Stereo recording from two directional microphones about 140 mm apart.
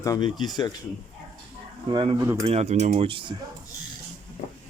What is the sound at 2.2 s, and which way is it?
Speech, 20° right (ahead or behind).